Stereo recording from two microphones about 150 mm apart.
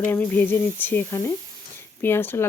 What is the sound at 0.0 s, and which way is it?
Speech, 15° left (ahead or behind).